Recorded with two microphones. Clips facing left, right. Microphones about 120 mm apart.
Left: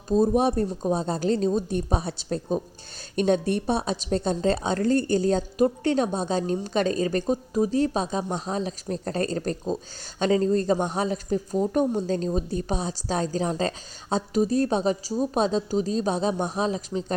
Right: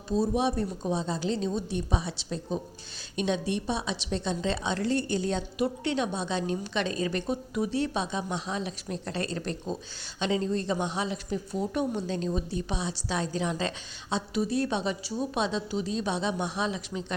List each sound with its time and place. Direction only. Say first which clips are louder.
0.1 s a woman's voice: left 6 dB; 50° left (ahead or behind)